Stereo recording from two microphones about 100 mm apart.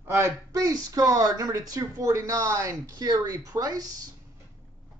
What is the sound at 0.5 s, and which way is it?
Speech, 35° right (ahead or behind).